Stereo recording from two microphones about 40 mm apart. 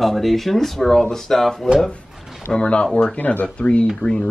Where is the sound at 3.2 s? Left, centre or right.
Left.